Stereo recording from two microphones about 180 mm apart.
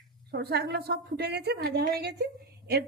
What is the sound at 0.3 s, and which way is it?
A woman's voice, 65° right (ahead or behind).